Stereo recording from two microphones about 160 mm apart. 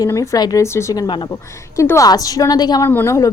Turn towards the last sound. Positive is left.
turn(degrees=20)  # may be behind; listen again after turning